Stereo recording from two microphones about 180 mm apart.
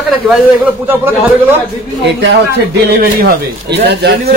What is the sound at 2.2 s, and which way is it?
A man's voice, 75° right (ahead or behind).